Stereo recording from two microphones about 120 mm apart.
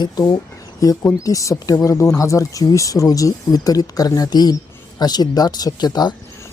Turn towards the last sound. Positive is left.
turn(degrees=35)  # may be behind; listen again after turning